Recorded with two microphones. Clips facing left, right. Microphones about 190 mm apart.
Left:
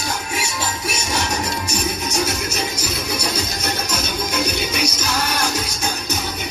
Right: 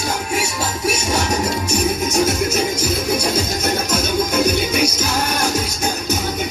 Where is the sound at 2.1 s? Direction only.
50° right (ahead or behind).